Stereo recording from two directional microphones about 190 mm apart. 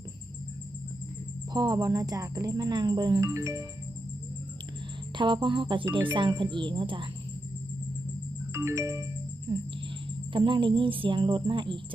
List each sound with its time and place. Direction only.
1.5 s speech: 20° right (ahead or behind)
5.1 s speech: 25° right (ahead or behind)
8.5 s music: 15° right (ahead or behind)
10.3 s speech: 25° right (ahead or behind)